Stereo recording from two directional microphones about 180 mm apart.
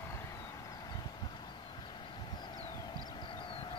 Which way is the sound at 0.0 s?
15° left (ahead or behind).